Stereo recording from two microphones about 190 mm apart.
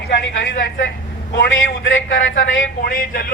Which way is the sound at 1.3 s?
85° left.